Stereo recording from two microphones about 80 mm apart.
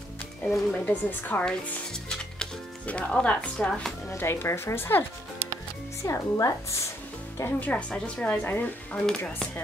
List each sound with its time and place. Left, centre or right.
0.4 s speech: centre
0.7 s a woman's voice: left
1.4 s speech: centre
4.1 s speech: left
6.0 s speech: left
7.6 s a woman's voice: centre